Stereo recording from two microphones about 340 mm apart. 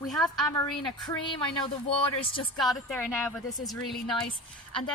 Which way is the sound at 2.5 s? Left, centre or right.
Centre.